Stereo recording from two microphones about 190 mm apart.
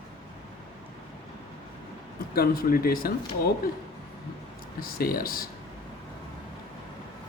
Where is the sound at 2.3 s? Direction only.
50° left (ahead or behind).